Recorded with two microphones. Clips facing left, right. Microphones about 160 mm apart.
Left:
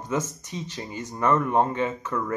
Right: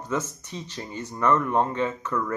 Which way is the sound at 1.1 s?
25° left (ahead or behind).